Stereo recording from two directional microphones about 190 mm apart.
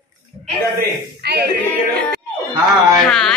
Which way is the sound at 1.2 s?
60° right (ahead or behind).